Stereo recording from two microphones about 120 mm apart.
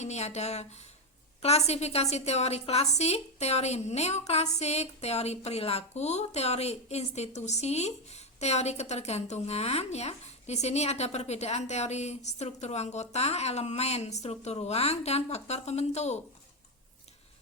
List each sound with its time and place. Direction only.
0.0 s a woman's voice: 65° left (ahead or behind)